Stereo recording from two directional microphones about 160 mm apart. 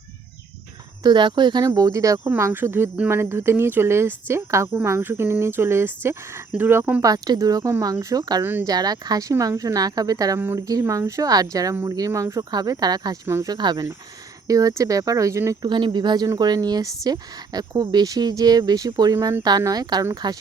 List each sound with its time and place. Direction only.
1.0 s speech: 30° right (ahead or behind)
8.4 s speech: 15° right (ahead or behind)
8.7 s speech: 25° right (ahead or behind)
15.7 s speech: 30° right (ahead or behind)